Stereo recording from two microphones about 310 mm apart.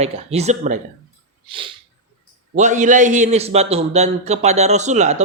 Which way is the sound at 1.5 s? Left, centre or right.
Centre.